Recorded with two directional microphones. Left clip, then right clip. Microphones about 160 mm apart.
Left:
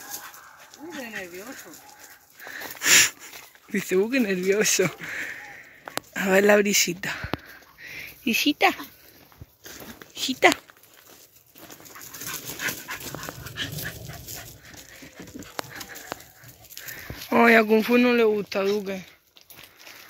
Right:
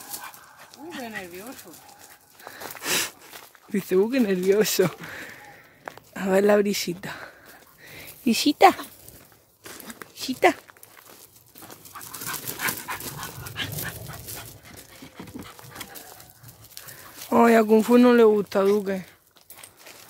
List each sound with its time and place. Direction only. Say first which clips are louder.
2.4 s wheeze: left 7 dB; 5° right (ahead or behind)
3.7 s speech: right 1 dB; 10° right (ahead or behind)
7.8 s a sound: left 6 dB; 15° right (ahead or behind)
8.3 s speech: right 4 dB; 30° right (ahead or behind)
9.7 s a sound: right 1 dB; 20° right (ahead or behind)
12.1 s dog: right 2 dB; 35° right (ahead or behind)
17.3 s speech: even; 10° right (ahead or behind)
17.9 s speech: right 5 dB; 35° right (ahead or behind)